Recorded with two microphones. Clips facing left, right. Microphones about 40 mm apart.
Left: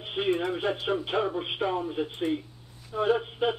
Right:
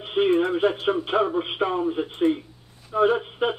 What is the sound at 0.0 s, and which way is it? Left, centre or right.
Speech, centre.